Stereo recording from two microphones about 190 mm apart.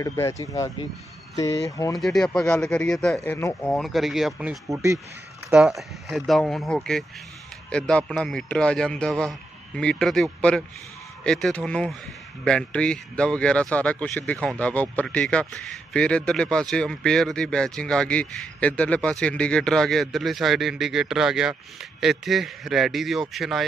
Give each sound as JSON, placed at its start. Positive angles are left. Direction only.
{"t": 0.0, "sound": "speech", "side_deg": 15}
{"t": 2.0, "sound": "speech", "side_deg": 0}
{"t": 3.7, "sound": "speech", "side_deg": 0}
{"t": 5.5, "sound": "speech", "side_deg": 0}